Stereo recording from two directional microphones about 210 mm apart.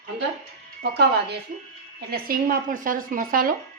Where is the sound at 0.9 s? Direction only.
50° right (ahead or behind).